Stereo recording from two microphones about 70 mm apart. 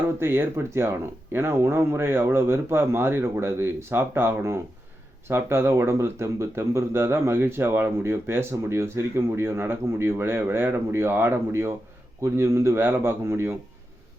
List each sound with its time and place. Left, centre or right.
0.2 s speech: right